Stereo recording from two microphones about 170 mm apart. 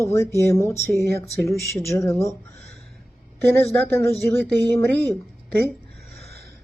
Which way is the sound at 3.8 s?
15° left (ahead or behind).